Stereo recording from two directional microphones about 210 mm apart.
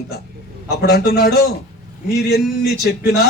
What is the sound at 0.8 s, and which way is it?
A man's voice, 50° left (ahead or behind).